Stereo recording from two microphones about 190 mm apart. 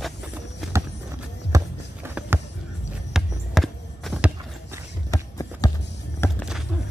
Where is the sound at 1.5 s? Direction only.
10° right (ahead or behind).